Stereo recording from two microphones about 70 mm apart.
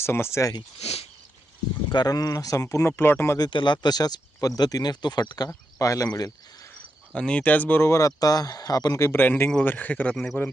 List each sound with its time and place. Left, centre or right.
0.0 s speech: left
1.9 s speech: left
2.6 s speech: left
3.3 s speech: left
5.5 s speech: left
6.1 s speech: left
7.1 s speech: centre
7.8 s speech: left
9.0 s speech: left
9.2 s speech: left
10.4 s speech: left